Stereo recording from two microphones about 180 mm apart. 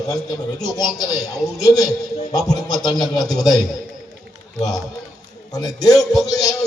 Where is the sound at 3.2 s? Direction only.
Centre (ahead or behind).